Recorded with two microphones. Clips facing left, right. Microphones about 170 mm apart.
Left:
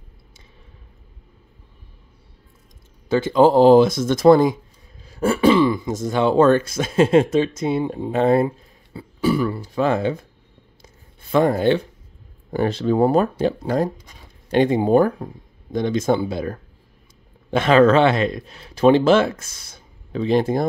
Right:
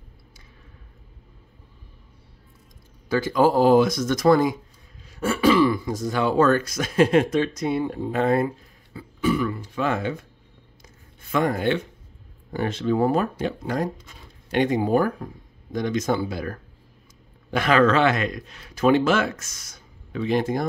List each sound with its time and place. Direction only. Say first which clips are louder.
3.1 s speech: left 5 dB; 25° left (ahead or behind)
11.3 s speech: left 5 dB; 30° left (ahead or behind)